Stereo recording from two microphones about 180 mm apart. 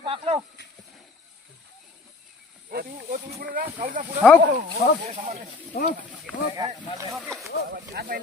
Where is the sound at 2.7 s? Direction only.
55° right (ahead or behind).